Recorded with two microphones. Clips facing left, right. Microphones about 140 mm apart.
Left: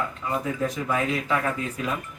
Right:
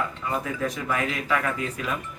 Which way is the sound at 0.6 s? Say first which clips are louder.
Left 2 dB; 20° left (ahead or behind).